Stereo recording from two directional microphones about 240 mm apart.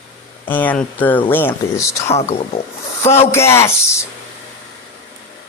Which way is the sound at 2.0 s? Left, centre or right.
Left.